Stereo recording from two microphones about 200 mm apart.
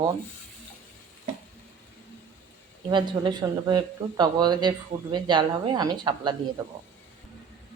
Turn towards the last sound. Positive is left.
turn(degrees=-20)  # may be behind; listen again after turning